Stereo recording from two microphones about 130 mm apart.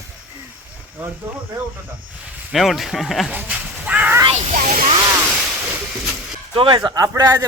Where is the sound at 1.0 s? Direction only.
15° right (ahead or behind).